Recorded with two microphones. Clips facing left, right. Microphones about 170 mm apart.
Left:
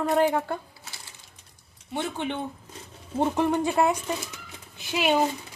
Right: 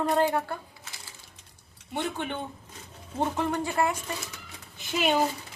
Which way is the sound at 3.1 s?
15° left (ahead or behind).